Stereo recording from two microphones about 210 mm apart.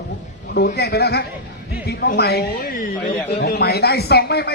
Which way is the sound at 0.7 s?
50° left (ahead or behind).